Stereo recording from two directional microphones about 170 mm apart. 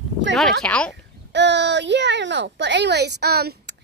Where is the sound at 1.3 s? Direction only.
90° right.